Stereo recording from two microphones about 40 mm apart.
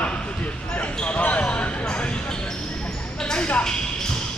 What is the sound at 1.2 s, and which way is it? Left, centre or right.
Basketball bounce, left.